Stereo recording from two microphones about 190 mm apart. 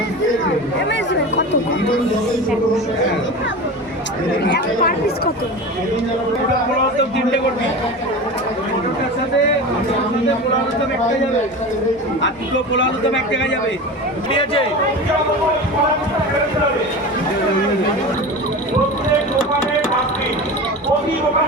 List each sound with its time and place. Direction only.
4.8 s speech: 50° left (ahead or behind)
12.7 s a man's voice: 75° left (ahead or behind)
14.3 s speech: 30° left (ahead or behind)